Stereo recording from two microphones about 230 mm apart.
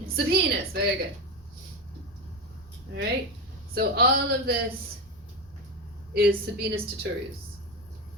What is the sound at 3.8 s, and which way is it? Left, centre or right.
Speech, right.